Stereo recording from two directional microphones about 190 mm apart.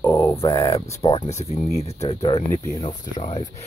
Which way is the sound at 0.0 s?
15° left (ahead or behind).